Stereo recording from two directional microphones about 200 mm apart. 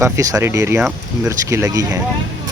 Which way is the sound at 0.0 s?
15° right (ahead or behind).